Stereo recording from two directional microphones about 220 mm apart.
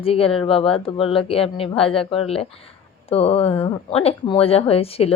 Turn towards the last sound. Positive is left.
turn(degrees=25)  # may be behind; listen again after turning